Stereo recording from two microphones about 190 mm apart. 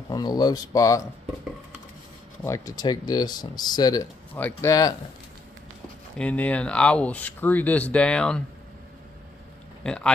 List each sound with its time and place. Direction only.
0.1 s speech: 20° left (ahead or behind)
2.4 s speech: 15° left (ahead or behind)
6.1 s speech: 5° left (ahead or behind)
9.8 s speech: 5° left (ahead or behind)